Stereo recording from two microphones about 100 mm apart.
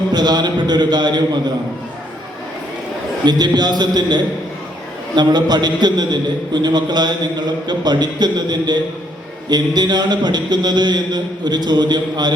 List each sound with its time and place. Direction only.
0.1 s a man's voice: 45° right (ahead or behind)
3.2 s a man's voice: 45° right (ahead or behind)